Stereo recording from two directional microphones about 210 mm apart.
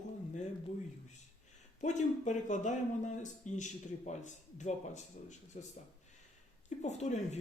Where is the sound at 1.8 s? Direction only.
35° left (ahead or behind).